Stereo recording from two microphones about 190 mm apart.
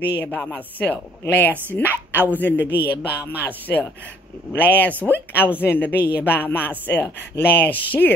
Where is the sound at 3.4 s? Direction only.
10° left (ahead or behind).